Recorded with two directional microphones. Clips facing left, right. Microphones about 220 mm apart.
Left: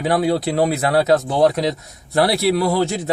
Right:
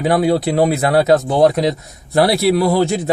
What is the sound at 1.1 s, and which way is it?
Speech, 55° right (ahead or behind).